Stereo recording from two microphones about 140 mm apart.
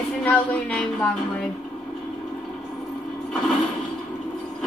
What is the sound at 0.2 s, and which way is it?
Speech, 10° left (ahead or behind).